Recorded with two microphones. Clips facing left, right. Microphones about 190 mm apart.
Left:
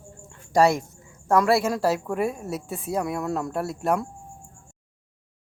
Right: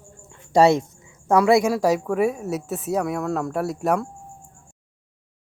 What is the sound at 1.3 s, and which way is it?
Speech, 20° right (ahead or behind).